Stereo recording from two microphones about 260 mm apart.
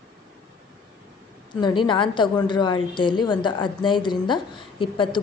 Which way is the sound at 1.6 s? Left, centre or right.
Centre.